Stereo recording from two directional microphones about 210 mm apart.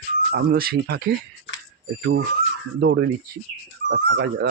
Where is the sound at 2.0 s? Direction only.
60° right (ahead or behind).